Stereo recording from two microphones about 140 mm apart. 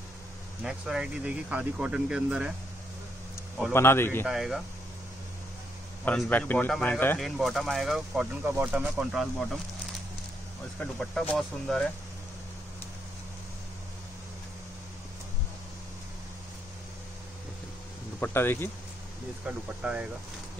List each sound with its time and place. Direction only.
0.7 s speech: 5° right (ahead or behind)
3.7 s speech: 15° left (ahead or behind)
4.3 s speech: centre (ahead or behind)
6.1 s speech: 10° left (ahead or behind)
7.2 s speech: centre (ahead or behind)
10.8 s speech: 5° left (ahead or behind)
18.2 s speech: 15° left (ahead or behind)
19.4 s speech: 10° right (ahead or behind)